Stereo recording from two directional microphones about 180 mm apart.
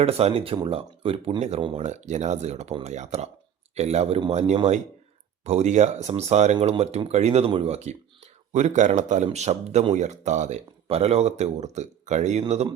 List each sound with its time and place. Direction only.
0.0 s speech: 35° right (ahead or behind)